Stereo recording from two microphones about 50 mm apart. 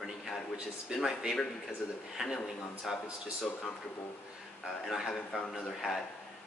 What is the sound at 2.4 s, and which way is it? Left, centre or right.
Speech, centre.